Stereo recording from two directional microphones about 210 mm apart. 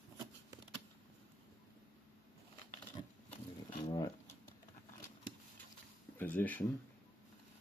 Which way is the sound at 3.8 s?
20° left (ahead or behind).